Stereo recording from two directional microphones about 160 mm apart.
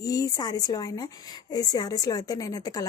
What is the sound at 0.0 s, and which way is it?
Speech, 20° left (ahead or behind).